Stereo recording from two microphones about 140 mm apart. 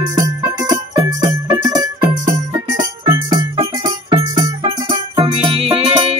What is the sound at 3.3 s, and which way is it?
Music, 30° right (ahead or behind).